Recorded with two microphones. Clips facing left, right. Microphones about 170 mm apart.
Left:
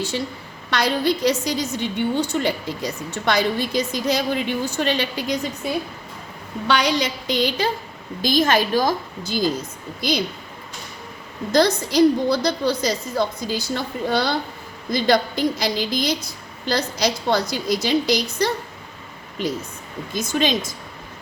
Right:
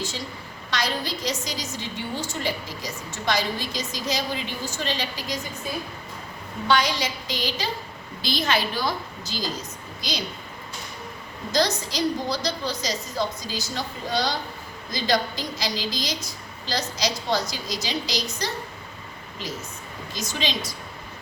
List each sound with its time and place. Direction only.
0.7 s a woman's voice: 60° left (ahead or behind)
6.7 s a woman's voice: 65° left (ahead or behind)
8.2 s a woman's voice: 45° left (ahead or behind)
11.5 s a woman's voice: 55° left (ahead or behind)
20.1 s a woman's voice: 50° left (ahead or behind)